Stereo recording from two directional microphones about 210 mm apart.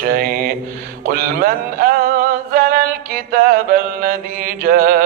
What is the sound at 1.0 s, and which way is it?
Music, 45° right (ahead or behind).